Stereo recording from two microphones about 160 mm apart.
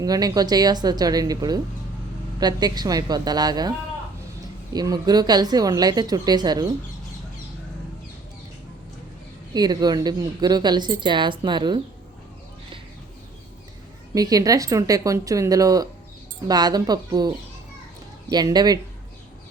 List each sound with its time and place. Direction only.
0.0 s a woman's voice: 25° right (ahead or behind)
4.7 s a woman's voice: 25° right (ahead or behind)
9.5 s a woman's voice: 25° right (ahead or behind)
14.1 s a woman's voice: 20° right (ahead or behind)